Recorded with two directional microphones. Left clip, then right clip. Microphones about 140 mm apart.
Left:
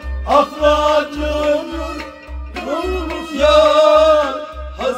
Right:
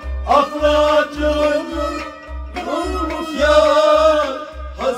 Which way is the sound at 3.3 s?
15° left (ahead or behind).